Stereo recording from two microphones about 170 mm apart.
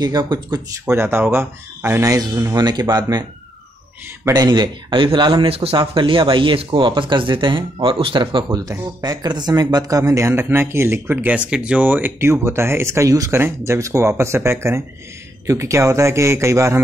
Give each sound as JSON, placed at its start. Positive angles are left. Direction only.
{"t": 0.0, "sound": "speech", "side_deg": -25}